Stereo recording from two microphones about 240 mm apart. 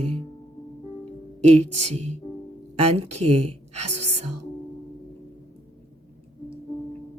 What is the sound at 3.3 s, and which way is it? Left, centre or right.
Speech, right.